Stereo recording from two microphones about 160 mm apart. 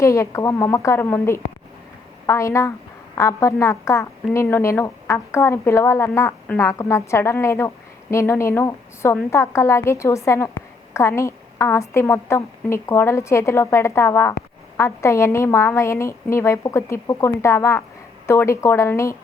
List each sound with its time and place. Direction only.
0.0 s a woman's voice: 20° left (ahead or behind)